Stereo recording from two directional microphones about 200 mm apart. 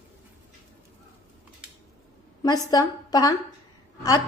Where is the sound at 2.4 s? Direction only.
20° left (ahead or behind).